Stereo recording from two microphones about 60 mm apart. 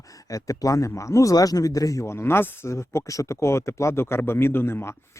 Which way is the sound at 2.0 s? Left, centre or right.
Left.